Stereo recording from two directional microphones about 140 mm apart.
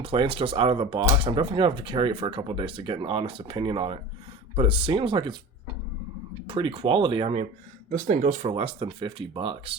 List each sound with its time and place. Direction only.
0.0 s speech: 40° right (ahead or behind)
6.5 s speech: 35° right (ahead or behind)
7.9 s speech: 65° right (ahead or behind)
8.5 s speech: 40° right (ahead or behind)